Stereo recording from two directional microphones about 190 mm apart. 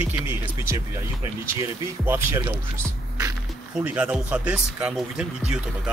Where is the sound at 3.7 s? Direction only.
10° right (ahead or behind).